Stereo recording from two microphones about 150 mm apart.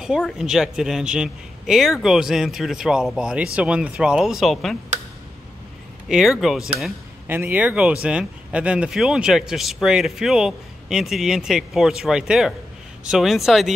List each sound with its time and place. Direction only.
0.0 s speech: 5° right (ahead or behind)
6.0 s speech: 5° right (ahead or behind)
7.2 s speech: 15° right (ahead or behind)